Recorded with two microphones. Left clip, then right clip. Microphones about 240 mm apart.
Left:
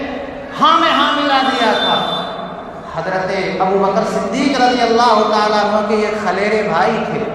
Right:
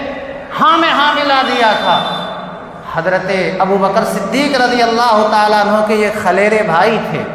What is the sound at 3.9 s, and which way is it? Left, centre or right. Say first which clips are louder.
A man's voice: right 3 dB; right.